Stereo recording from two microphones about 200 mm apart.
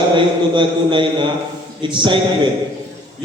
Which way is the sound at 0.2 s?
25° right (ahead or behind).